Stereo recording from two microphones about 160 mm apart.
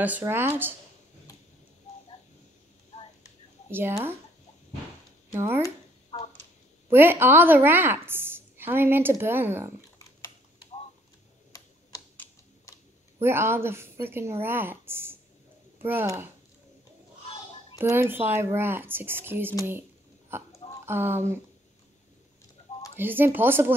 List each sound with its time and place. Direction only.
0.3 s a woman's voice: 15° right (ahead or behind)
3.7 s a woman's voice: 15° right (ahead or behind)
5.3 s speech: 15° right (ahead or behind)
6.1 s a sound: 35° left (ahead or behind)
6.9 s a woman's voice: 15° right (ahead or behind)
13.2 s a woman's voice: 15° right (ahead or behind)
17.7 s a woman's voice: 15° right (ahead or behind)
22.9 s a woman's voice: 15° right (ahead or behind)